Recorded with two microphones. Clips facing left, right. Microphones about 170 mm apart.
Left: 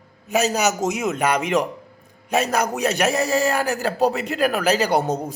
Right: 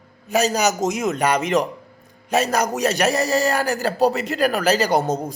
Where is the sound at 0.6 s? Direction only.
35° right (ahead or behind).